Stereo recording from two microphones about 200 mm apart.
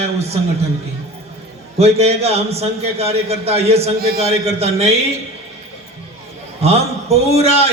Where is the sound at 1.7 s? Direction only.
30° right (ahead or behind).